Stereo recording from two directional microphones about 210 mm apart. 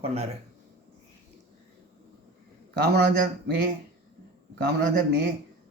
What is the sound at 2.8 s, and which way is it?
Speech, 50° right (ahead or behind).